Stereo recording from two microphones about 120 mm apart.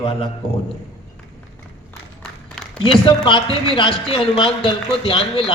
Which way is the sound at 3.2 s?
45° left (ahead or behind).